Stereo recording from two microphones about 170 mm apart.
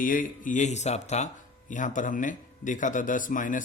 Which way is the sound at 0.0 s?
55° left (ahead or behind).